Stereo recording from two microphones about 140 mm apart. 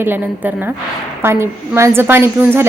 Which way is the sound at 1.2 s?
20° right (ahead or behind).